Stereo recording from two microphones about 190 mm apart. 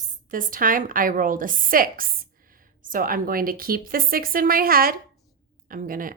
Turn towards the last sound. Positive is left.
turn(degrees=-45)  # may be behind; listen again after turning